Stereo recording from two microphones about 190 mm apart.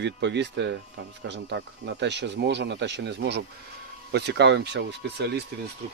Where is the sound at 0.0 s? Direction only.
65° right (ahead or behind).